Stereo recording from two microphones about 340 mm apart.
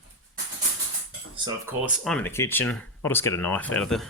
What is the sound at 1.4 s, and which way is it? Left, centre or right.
Speech, centre.